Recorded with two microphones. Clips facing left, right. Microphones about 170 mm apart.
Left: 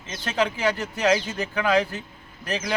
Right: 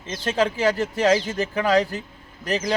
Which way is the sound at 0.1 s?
40° right (ahead or behind).